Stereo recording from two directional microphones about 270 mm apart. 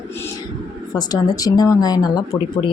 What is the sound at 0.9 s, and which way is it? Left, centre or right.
Speech, centre.